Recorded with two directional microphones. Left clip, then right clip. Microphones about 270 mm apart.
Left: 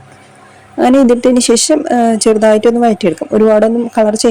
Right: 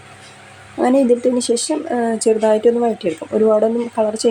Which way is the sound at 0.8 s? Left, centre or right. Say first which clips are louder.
Left 5 dB; left.